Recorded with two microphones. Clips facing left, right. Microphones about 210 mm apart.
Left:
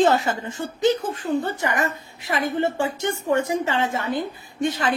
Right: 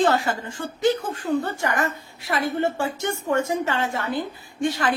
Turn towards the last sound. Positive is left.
turn(degrees=20)  # may be behind; listen again after turning